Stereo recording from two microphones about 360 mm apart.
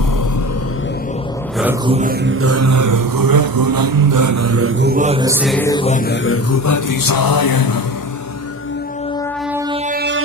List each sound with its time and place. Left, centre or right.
1.5 s music: centre
1.9 s a sound: right; by 6.1 s left
6.2 s music: left
6.7 s music: left
9.5 s music: centre
9.8 s music: right